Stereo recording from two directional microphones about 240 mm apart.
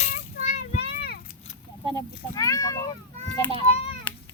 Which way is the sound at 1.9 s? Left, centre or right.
Centre.